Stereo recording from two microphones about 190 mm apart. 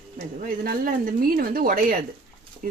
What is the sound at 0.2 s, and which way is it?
Speech, 50° right (ahead or behind).